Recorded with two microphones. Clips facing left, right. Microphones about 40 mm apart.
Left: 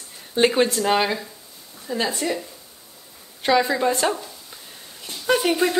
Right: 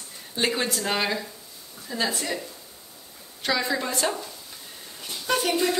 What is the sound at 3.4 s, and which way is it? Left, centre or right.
Speech, left.